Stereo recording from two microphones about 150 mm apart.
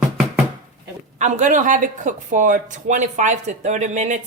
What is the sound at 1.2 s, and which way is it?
Speech, 50° right (ahead or behind).